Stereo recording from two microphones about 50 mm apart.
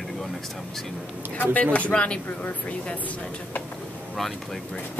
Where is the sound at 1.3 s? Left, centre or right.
Left.